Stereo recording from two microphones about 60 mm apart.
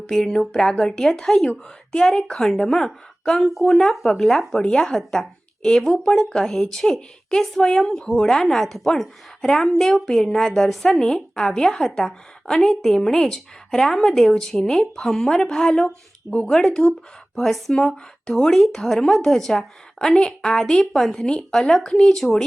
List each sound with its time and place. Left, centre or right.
0.1 s a woman's voice: centre